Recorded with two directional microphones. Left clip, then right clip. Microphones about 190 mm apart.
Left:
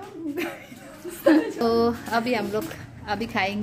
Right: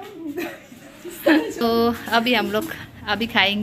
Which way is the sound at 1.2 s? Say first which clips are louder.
Right 1 dB; 10° left (ahead or behind).